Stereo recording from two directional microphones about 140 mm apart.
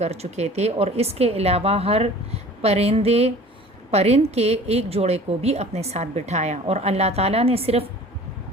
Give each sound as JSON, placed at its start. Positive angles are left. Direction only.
{"t": 0.0, "sound": "a woman's voice", "side_deg": -50}